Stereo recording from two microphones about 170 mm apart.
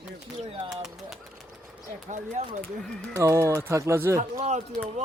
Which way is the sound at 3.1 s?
20° right (ahead or behind).